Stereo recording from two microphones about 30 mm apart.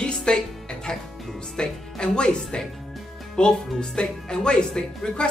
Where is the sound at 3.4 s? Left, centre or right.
Left.